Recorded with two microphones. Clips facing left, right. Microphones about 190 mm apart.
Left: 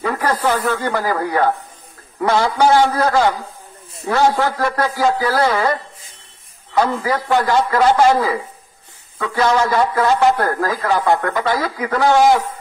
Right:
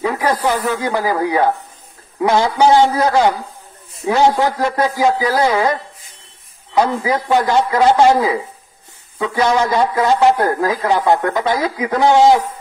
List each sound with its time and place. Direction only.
0.0 s a man's voice: 10° right (ahead or behind)